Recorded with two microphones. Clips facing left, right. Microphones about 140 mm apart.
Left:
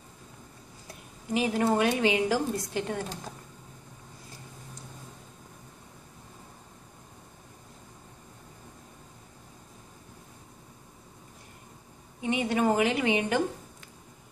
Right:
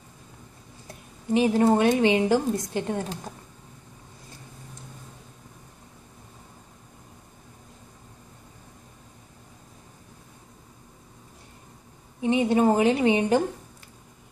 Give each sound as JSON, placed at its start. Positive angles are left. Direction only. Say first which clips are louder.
{"t": 1.3, "sound": "a woman's voice", "louder": "right 6 dB", "side_deg": -25}
{"t": 12.2, "sound": "a woman's voice", "louder": "right 6 dB", "side_deg": -30}